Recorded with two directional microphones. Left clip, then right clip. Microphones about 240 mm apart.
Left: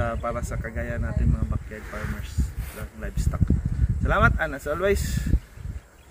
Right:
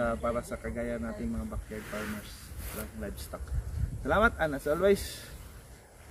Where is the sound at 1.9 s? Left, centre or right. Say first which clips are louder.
Left 2 dB; right.